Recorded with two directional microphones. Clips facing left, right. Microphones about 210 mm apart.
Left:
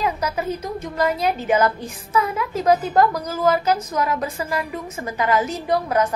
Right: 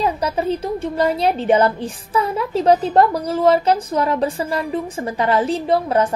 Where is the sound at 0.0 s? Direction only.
30° right (ahead or behind).